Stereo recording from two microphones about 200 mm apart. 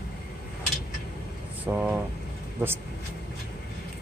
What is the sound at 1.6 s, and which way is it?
Speech, 5° right (ahead or behind).